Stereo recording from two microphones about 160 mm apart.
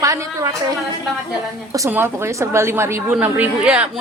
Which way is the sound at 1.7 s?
15° right (ahead or behind).